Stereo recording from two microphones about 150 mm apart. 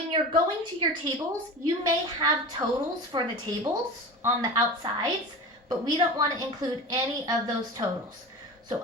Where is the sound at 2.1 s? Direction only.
30° right (ahead or behind).